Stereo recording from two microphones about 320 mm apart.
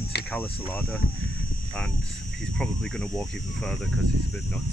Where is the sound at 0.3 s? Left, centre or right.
Centre.